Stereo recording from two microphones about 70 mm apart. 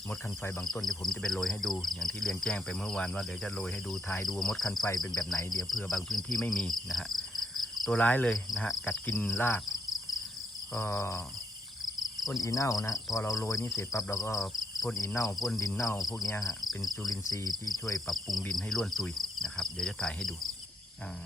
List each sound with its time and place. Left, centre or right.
0.1 s speech: left
0.6 s speech: centre
4.9 s cricket: left
5.6 s speech: centre
6.5 s cricket: centre
7.9 s speech: left
10.8 s speech: left
11.9 s cricket: left
12.4 s speech: left
16.0 s cricket: left
16.6 s cricket: centre
17.1 s cricket: left
18.1 s speech: centre